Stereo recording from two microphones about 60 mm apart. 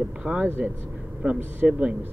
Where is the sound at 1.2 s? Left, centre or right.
Centre.